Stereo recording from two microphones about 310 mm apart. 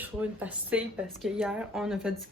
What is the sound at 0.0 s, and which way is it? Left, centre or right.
Speech, centre.